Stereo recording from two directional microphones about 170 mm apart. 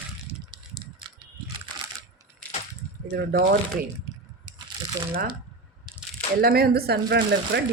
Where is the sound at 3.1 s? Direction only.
65° right (ahead or behind).